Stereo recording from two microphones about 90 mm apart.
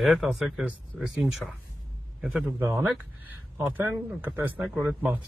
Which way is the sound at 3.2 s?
20° right (ahead or behind).